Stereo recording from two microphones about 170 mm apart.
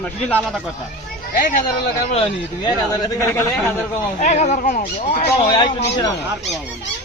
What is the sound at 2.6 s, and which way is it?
Speech, 25° left (ahead or behind).